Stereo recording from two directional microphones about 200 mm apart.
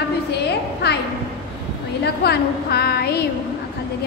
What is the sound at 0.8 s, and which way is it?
Speech, 55° left (ahead or behind).